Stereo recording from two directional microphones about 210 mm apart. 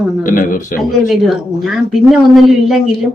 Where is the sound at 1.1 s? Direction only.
Centre (ahead or behind).